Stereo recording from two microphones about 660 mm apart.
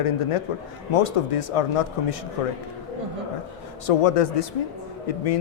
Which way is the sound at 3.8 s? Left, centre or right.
Left.